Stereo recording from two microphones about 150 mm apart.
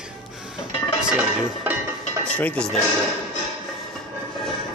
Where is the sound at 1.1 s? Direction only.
10° right (ahead or behind).